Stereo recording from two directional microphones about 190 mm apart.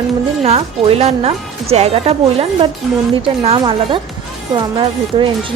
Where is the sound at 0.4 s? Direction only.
35° right (ahead or behind).